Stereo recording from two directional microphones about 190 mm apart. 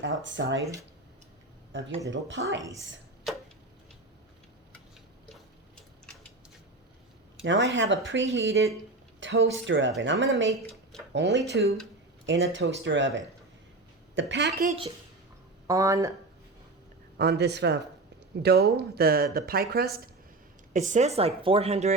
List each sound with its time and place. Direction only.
0.0 s speech: 80° right
1.7 s speech: 75° right (ahead or behind)
5.3 s a sound: 5° left (ahead or behind)
7.4 s speech: 75° right (ahead or behind)
11.5 s speech: 55° right (ahead or behind)
12.2 s speech: 75° right (ahead or behind)
15.6 s speech: 20° right (ahead or behind)
17.2 s speech: 60° right (ahead or behind)
20.7 s speech: 40° right (ahead or behind)